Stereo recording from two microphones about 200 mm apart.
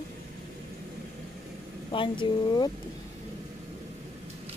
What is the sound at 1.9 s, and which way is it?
Speech, 25° left (ahead or behind).